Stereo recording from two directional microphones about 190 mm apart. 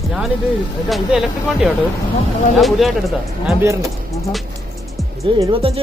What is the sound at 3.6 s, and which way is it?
Speech, 15° right (ahead or behind).